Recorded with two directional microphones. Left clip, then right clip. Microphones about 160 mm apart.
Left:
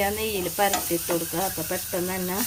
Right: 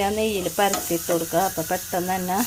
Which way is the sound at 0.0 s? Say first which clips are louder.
Right 3 dB; 45° right (ahead or behind).